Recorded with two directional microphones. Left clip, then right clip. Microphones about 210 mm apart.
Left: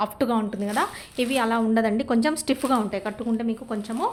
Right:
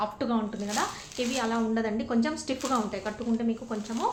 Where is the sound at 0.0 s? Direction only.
50° left (ahead or behind).